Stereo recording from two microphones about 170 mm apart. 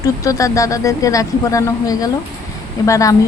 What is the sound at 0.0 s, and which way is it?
A woman's voice, 20° left (ahead or behind).